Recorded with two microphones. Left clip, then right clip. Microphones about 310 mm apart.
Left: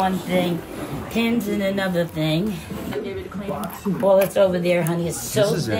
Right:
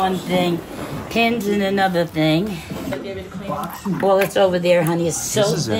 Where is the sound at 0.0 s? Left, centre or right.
Right.